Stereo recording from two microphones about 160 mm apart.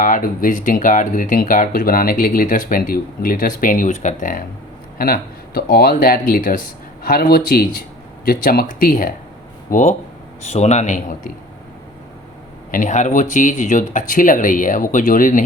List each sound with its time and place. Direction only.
0.0 s speech: 60° left (ahead or behind)
4.9 s speech: 65° left (ahead or behind)
10.4 s speech: 45° left (ahead or behind)
12.7 s speech: 50° left (ahead or behind)